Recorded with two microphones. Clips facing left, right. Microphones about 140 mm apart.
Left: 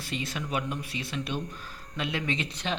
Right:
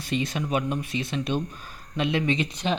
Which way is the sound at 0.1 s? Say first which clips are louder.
Right 6 dB; 20° right (ahead or behind).